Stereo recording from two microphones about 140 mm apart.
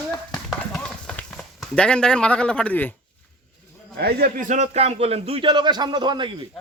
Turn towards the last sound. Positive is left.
turn(degrees=-35)  # may be behind; listen again after turning